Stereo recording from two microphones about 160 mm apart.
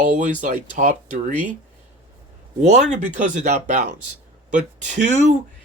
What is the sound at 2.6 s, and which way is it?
Speech, 45° right (ahead or behind).